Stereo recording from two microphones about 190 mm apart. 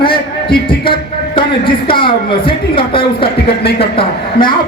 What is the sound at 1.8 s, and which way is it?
A man's voice, 25° left (ahead or behind).